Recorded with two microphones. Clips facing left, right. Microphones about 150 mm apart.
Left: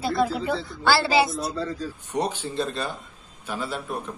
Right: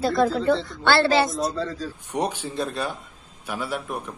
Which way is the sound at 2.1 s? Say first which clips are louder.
Even; 10° right (ahead or behind).